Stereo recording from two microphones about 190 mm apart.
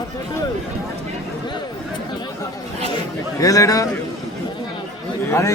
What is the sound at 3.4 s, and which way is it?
Speech, 20° left (ahead or behind).